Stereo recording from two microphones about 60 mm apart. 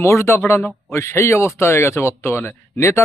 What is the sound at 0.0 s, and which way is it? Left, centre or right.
Speech, left.